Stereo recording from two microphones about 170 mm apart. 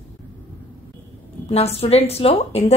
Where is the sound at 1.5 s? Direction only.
35° left (ahead or behind).